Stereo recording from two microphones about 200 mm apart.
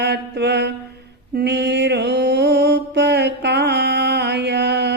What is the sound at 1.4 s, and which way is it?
Mantra, 55° right (ahead or behind).